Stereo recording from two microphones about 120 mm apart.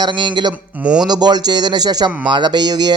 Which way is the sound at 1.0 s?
35° right (ahead or behind).